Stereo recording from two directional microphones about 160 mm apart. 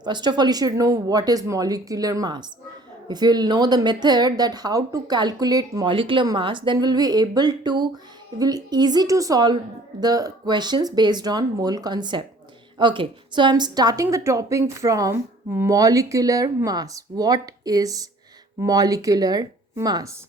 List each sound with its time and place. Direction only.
0.0 s a woman's voice: 25° right (ahead or behind)